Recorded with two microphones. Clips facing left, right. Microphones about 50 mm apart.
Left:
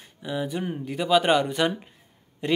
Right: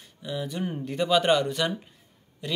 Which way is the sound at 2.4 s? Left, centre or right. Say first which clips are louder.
Left 7 dB; left.